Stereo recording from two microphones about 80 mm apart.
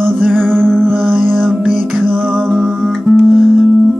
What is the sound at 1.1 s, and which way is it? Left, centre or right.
Music, right.